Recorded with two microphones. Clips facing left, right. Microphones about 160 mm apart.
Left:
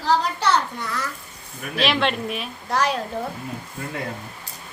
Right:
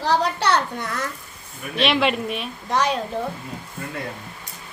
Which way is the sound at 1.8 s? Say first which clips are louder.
Right 2 dB; centre (ahead or behind).